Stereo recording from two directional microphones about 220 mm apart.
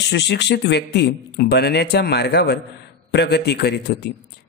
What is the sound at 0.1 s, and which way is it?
A man's voice, 50° left (ahead or behind).